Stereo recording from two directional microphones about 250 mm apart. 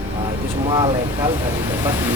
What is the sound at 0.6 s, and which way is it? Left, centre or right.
Speech, centre.